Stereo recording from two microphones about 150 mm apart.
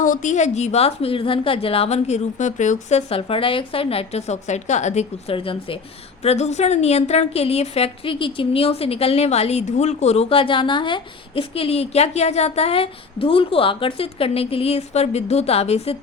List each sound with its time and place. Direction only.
0.0 s a woman's voice: 60° left (ahead or behind)
3.1 s a woman's voice: 40° left (ahead or behind)
6.2 s a woman's voice: 45° left (ahead or behind)